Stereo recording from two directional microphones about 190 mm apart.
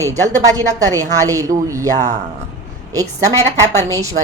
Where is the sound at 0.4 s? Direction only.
20° right (ahead or behind).